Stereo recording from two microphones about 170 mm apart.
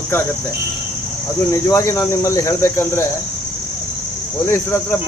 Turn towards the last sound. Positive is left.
turn(degrees=15)  # may be behind; listen again after turning